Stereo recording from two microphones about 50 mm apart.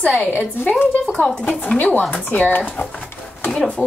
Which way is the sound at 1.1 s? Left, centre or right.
Centre.